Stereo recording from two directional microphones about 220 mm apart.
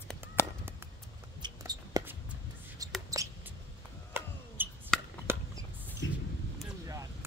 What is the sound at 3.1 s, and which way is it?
Mouse, 15° right (ahead or behind).